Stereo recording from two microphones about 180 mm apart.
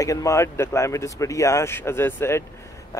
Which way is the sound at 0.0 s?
15° left (ahead or behind).